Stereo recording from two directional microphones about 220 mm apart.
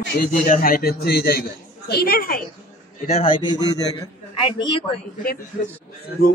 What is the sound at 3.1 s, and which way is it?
Speech, 25° left (ahead or behind).